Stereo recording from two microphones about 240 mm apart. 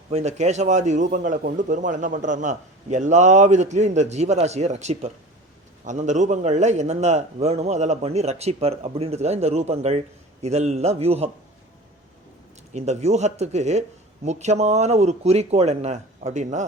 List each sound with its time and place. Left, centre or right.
0.1 s speech: right
12.7 s speech: right